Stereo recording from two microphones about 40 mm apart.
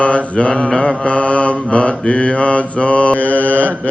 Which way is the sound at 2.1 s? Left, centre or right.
Centre.